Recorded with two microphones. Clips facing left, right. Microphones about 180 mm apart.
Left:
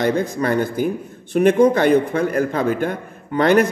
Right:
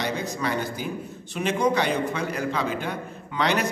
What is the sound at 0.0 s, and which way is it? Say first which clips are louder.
A man's voice: left 9 dB; 55° left (ahead or behind).